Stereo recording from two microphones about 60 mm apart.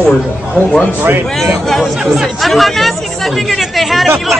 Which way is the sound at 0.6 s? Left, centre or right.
Centre.